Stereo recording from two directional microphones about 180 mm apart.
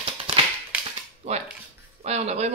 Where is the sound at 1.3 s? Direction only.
35° right (ahead or behind).